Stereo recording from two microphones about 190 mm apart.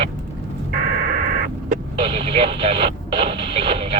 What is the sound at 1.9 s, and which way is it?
Radio, 30° right (ahead or behind).